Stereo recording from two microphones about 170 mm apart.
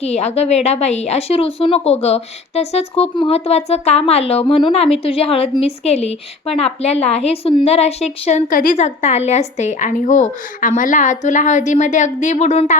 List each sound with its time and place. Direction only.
0.0 s a woman's voice: 40° left (ahead or behind)